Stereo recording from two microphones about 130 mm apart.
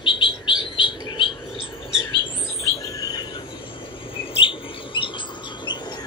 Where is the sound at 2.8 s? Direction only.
25° left (ahead or behind).